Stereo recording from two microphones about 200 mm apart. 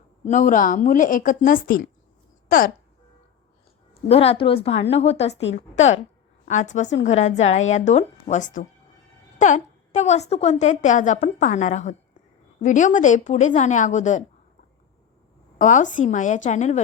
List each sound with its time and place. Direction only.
0.3 s a woman's voice: 40° left (ahead or behind)
4.1 s a woman's voice: 30° left (ahead or behind)
15.5 s a woman's voice: 40° left (ahead or behind)